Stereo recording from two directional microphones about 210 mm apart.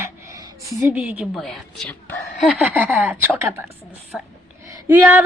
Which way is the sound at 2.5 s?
5° right (ahead or behind).